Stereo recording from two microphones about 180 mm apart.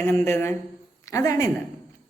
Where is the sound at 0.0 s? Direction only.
15° left (ahead or behind).